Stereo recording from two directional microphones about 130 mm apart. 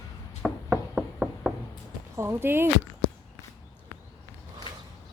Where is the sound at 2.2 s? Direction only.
20° right (ahead or behind).